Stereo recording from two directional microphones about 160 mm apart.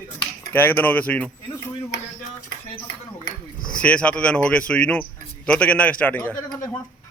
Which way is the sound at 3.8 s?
5° left (ahead or behind).